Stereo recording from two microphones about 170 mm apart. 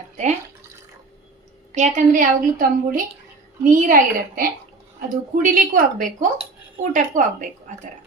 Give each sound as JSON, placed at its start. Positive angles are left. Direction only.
{"t": 1.7, "sound": "a woman's voice", "side_deg": -45}